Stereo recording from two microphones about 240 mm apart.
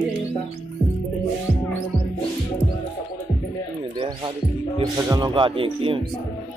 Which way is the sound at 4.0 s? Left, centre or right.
Centre.